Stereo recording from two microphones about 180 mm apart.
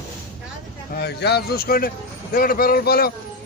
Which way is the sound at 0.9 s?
65° left (ahead or behind).